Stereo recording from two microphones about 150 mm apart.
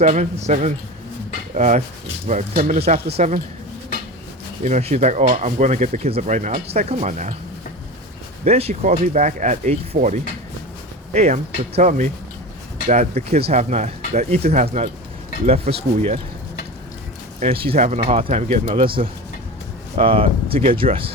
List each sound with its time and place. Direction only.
0.0 s speech: 50° right (ahead or behind)
4.6 s speech: 45° right (ahead or behind)
8.4 s speech: 45° right (ahead or behind)
11.1 s speech: 45° right (ahead or behind)
17.4 s speech: 40° right (ahead or behind)